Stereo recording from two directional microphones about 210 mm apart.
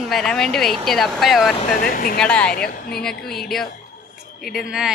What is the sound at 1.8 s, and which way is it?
Speech, 45° left (ahead or behind).